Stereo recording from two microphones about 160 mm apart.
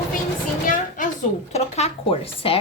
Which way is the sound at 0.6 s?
55° left (ahead or behind).